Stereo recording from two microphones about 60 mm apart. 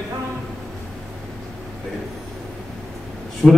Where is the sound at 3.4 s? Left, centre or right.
Centre.